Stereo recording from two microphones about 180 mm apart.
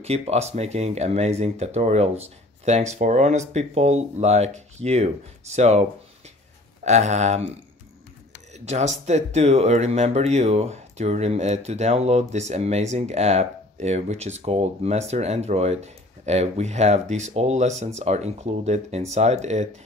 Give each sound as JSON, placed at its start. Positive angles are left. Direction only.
{"t": 0.0, "sound": "speech", "side_deg": -35}